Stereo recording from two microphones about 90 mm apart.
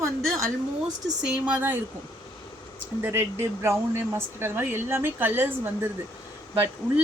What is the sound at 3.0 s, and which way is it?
Speech, 25° right (ahead or behind).